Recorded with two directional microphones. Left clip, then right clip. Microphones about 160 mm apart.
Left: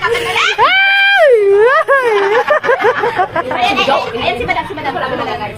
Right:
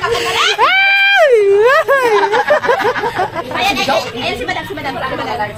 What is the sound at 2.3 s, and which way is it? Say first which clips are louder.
Snicker: left 1 dB; centre (ahead or behind).